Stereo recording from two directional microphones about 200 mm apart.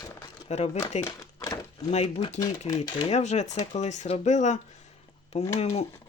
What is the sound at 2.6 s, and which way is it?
Speech, 20° left (ahead or behind).